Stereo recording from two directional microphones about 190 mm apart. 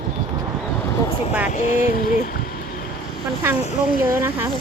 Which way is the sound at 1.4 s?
40° left (ahead or behind).